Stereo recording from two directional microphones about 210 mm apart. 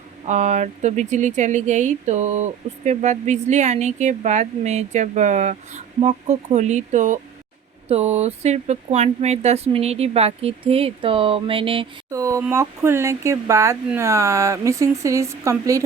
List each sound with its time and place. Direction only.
0.3 s speech: 35° right (ahead or behind)
12.1 s speech: 15° right (ahead or behind)